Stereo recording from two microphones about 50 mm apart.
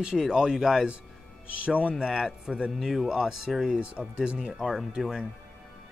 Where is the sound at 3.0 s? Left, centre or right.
Centre.